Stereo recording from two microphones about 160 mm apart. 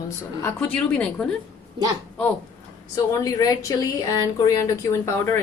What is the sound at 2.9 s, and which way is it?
Speech, 25° left (ahead or behind).